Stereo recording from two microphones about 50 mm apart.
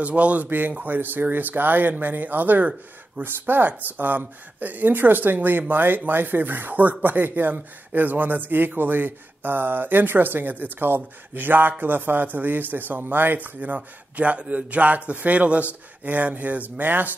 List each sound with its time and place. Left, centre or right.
0.0 s speech: right
0.5 s speech: right